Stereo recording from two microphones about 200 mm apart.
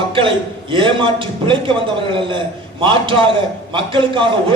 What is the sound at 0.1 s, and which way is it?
A man's voice, 25° right (ahead or behind).